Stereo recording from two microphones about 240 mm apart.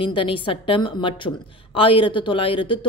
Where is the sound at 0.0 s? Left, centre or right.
Left.